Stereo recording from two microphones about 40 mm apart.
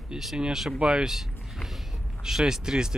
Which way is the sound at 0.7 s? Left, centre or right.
Right.